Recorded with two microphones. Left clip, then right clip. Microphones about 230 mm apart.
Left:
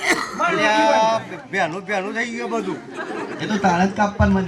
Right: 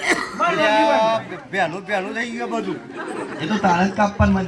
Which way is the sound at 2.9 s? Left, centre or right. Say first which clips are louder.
Even; left.